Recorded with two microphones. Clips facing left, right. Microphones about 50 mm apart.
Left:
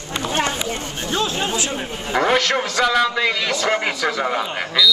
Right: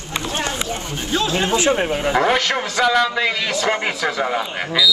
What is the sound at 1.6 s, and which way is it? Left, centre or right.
Speech, right.